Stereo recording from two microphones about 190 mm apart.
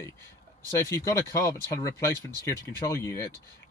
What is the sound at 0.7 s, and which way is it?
Speech, 15° left (ahead or behind).